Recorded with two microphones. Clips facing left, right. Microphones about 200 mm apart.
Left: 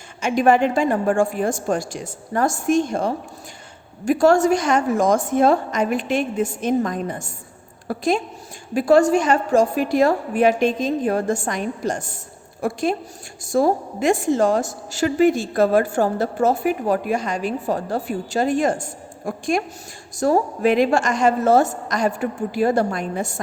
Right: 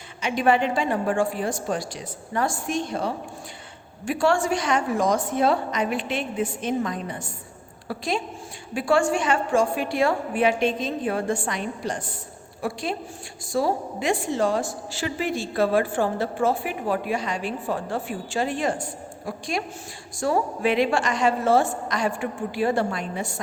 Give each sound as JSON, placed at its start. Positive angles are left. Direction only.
{"t": 0.2, "sound": "a woman's voice", "side_deg": 45}